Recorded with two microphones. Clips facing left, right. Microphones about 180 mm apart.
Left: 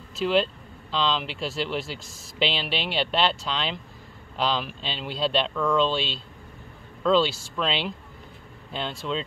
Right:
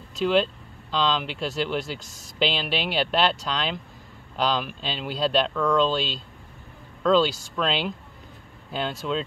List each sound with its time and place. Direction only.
0.1 s speech: centre (ahead or behind)